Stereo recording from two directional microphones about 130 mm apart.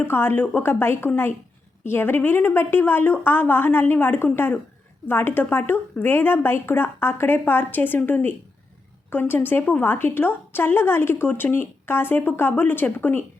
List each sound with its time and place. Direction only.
0.0 s a woman's voice: 15° left (ahead or behind)